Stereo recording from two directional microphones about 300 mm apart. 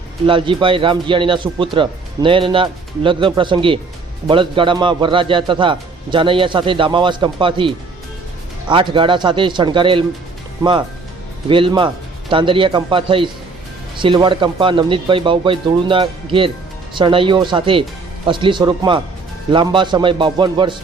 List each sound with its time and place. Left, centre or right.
0.3 s speech: centre